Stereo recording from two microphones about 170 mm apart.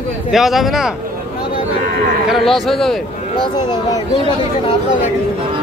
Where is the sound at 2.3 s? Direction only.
Centre (ahead or behind).